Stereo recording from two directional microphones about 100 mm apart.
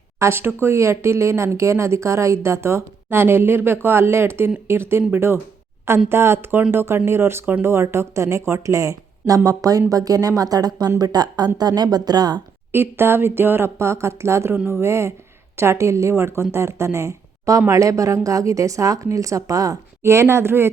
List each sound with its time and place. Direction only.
0.2 s speech: 25° right (ahead or behind); by 12.4 s 45° right (ahead or behind)
12.7 s speech: 25° right (ahead or behind)